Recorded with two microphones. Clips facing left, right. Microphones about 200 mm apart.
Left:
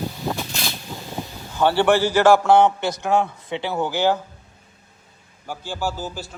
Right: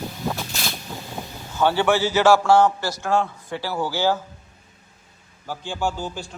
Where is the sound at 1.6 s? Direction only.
15° left (ahead or behind).